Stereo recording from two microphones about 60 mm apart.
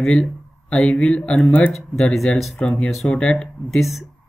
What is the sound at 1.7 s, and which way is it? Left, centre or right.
Speech, centre.